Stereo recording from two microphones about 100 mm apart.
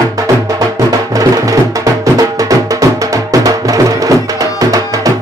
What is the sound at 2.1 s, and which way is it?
Music, 35° right (ahead or behind).